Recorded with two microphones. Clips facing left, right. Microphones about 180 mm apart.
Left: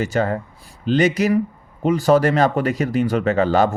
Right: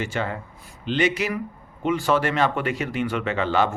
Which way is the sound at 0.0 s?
40° left (ahead or behind).